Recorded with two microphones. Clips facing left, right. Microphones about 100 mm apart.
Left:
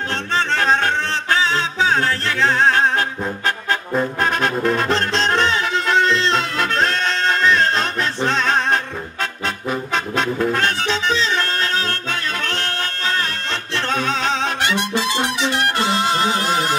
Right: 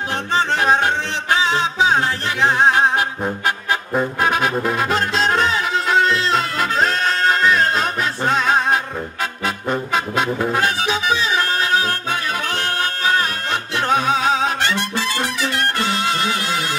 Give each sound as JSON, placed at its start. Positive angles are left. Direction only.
{"t": 0.3, "sound": "music", "side_deg": -15}
{"t": 4.2, "sound": "music", "side_deg": -5}
{"t": 9.9, "sound": "music", "side_deg": -10}
{"t": 14.6, "sound": "music", "side_deg": 15}